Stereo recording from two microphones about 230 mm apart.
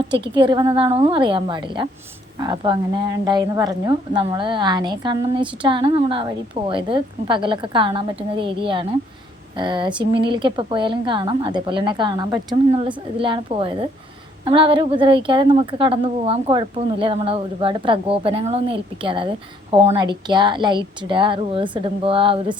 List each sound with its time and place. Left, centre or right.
0.2 s a woman's voice: right